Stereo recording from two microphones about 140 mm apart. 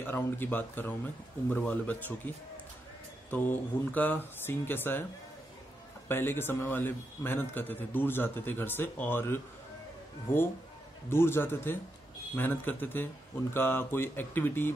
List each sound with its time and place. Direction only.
0.0 s a man's voice: 15° left (ahead or behind)
6.0 s a man's voice: 15° left (ahead or behind)